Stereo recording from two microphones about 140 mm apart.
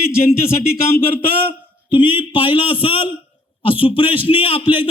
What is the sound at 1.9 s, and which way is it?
A man's voice, 35° left (ahead or behind).